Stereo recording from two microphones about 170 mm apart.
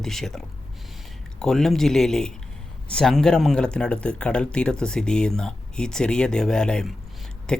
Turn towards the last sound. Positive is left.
turn(degrees=5)  # may be behind; listen again after turning